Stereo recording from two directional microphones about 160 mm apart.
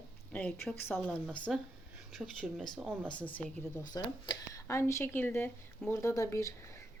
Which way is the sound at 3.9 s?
25° left (ahead or behind).